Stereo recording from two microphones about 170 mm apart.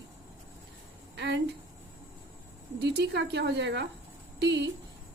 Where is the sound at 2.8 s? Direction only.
85° right.